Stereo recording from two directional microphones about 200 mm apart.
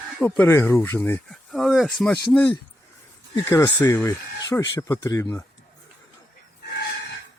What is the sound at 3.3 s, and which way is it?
Speech, 15° left (ahead or behind).